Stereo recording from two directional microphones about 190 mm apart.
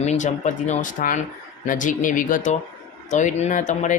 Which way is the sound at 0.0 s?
35° left (ahead or behind).